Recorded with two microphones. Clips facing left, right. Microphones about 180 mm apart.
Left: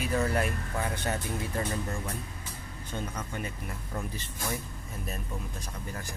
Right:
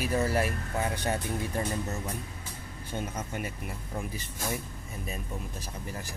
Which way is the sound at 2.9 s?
15° right (ahead or behind).